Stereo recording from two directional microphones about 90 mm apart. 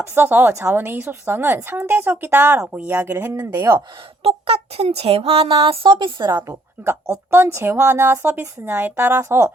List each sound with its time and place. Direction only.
0.1 s a woman's voice: 25° right (ahead or behind)
3.3 s speech: 40° right (ahead or behind)
3.8 s speech: 90° right; by 6.4 s 55° right (ahead or behind)
7.1 s a woman's voice: 25° right (ahead or behind)